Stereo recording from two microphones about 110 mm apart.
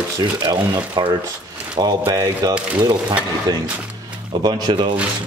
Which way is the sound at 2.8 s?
40° right (ahead or behind).